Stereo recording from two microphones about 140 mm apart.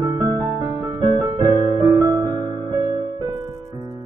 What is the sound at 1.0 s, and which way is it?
Piano, 30° right (ahead or behind).